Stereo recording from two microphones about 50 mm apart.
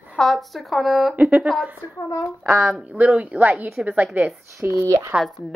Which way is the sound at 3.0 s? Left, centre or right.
Right.